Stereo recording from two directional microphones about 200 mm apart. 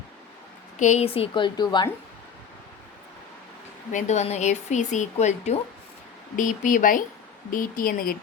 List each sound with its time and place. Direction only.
0.8 s a woman's voice: 35° left (ahead or behind)
3.9 s speech: 35° left (ahead or behind)